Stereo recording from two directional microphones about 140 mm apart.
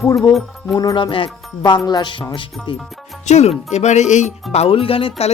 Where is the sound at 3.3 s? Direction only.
55° left (ahead or behind).